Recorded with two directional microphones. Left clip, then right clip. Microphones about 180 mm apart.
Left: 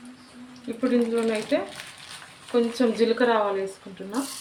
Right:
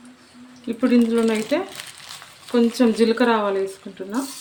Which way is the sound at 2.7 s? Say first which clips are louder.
Right 4 dB; 75° right (ahead or behind).